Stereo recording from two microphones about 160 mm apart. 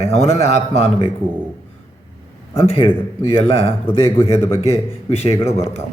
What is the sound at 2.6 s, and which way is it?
A man's voice, 35° left (ahead or behind).